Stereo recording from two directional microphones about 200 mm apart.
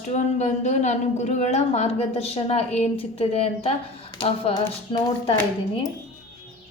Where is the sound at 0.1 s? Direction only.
35° left (ahead or behind).